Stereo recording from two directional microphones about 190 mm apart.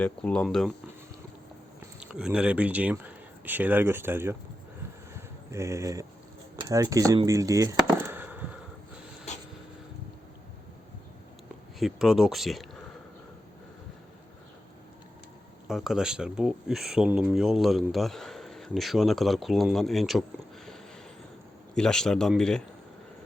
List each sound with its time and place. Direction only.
0.0 s speech: 5° left (ahead or behind)
2.0 s speech: 5° right (ahead or behind)
5.1 s a sound: 15° right (ahead or behind)
6.6 s chop: 20° right (ahead or behind)
9.3 s a sound: 35° left (ahead or behind)
11.8 s speech: centre (ahead or behind)
15.6 s speech: centre (ahead or behind)
21.8 s speech: 5° left (ahead or behind)